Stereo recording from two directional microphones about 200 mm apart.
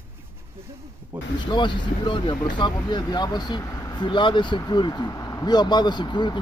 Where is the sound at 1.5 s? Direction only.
25° left (ahead or behind).